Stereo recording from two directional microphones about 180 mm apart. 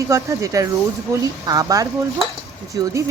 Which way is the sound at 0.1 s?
15° right (ahead or behind).